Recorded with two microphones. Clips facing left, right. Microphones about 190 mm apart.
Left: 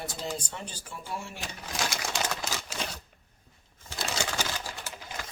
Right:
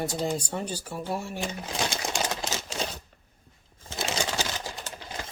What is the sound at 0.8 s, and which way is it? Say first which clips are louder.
Speech: right 6 dB; 40° right (ahead or behind).